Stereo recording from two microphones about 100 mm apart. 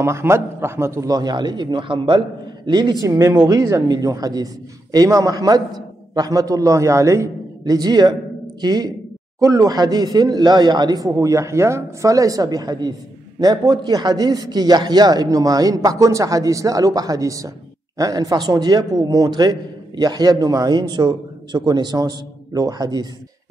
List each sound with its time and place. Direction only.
0.0 s a man's voice: 25° right (ahead or behind)